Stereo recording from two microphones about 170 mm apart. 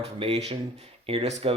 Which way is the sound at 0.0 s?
35° right (ahead or behind).